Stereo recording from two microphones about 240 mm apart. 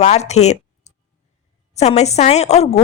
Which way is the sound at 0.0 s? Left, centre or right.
Left.